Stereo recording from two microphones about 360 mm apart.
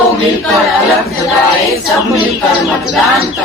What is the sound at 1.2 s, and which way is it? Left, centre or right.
Speech, centre.